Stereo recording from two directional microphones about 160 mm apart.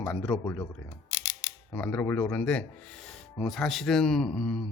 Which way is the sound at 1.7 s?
15° left (ahead or behind).